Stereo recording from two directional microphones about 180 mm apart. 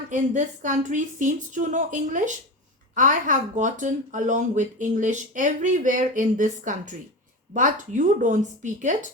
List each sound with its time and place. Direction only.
0.1 s speech: 45° right (ahead or behind)